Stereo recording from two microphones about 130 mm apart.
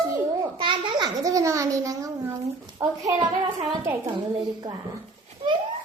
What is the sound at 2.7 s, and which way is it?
Speech, 25° right (ahead or behind).